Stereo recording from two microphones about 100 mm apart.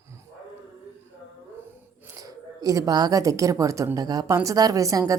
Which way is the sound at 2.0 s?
35° right (ahead or behind).